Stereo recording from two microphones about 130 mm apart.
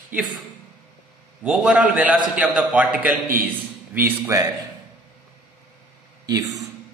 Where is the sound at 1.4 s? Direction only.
5° right (ahead or behind); by 4.5 s 20° right (ahead or behind).